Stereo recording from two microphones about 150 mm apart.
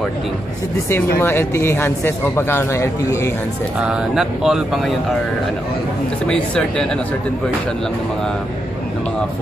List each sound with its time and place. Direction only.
0.8 s speech: 15° left (ahead or behind)
3.8 s speech: 5° right (ahead or behind)
6.2 s speech: 5° left (ahead or behind)